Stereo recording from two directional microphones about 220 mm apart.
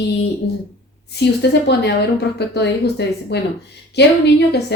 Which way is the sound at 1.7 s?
50° left (ahead or behind).